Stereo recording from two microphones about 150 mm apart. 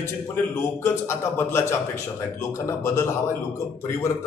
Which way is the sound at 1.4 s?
15° left (ahead or behind).